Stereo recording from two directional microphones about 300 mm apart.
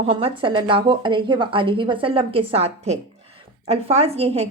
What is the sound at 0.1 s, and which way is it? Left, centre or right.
A woman's voice, centre.